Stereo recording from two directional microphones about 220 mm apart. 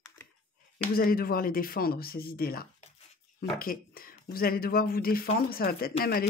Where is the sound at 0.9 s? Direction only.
40° left (ahead or behind).